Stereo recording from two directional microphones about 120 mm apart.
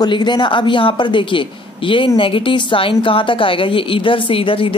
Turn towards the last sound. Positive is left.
turn(degrees=50)  # may be behind; listen again after turning